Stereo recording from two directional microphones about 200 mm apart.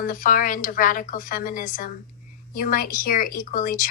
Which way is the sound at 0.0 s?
45° left (ahead or behind).